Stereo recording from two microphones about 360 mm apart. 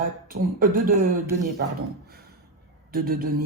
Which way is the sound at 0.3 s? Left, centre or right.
Right.